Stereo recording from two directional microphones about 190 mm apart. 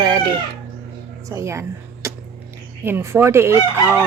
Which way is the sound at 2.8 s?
10° right (ahead or behind).